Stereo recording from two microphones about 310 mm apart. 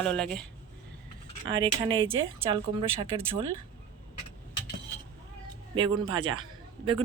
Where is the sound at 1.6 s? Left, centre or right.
Centre.